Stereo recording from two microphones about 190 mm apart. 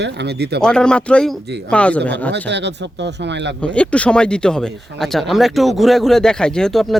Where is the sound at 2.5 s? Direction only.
65° right (ahead or behind).